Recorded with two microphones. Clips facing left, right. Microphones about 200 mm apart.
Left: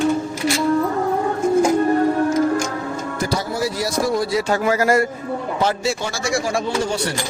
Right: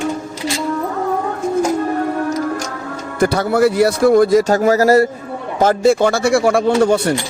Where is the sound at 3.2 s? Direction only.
60° right (ahead or behind); by 5.1 s 35° right (ahead or behind).